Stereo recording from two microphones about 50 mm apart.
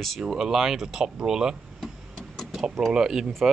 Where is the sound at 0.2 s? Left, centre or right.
Centre.